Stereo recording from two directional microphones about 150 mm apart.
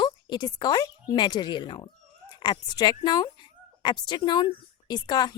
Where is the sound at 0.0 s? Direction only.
30° left (ahead or behind).